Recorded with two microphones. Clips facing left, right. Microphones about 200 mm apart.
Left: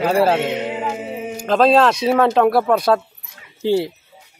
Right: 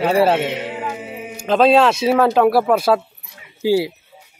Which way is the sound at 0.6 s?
20° left (ahead or behind).